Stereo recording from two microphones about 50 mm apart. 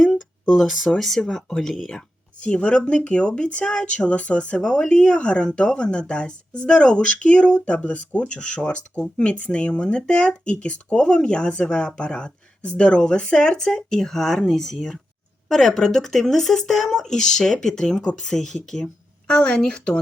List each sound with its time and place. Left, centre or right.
0.0 s a sound: centre
0.5 s speech: centre
2.4 s speech: left
19.3 s speech: left